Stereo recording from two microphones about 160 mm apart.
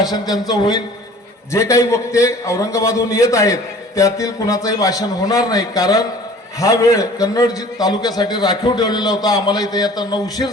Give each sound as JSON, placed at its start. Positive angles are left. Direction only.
{"t": 0.0, "sound": "a man's voice", "side_deg": 25}